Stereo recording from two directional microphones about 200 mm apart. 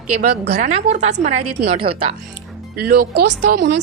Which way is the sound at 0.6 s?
35° right (ahead or behind).